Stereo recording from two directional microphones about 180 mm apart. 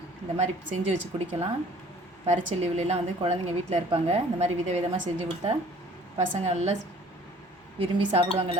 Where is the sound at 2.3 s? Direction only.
40° right (ahead or behind).